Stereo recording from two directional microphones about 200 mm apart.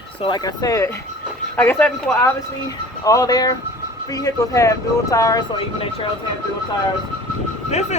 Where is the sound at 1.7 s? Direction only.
5° left (ahead or behind); by 6.1 s 25° left (ahead or behind).